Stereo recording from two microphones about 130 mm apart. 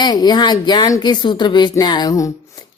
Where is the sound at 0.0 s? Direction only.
30° left (ahead or behind).